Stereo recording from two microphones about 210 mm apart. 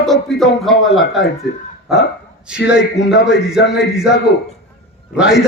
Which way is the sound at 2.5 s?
5° right (ahead or behind).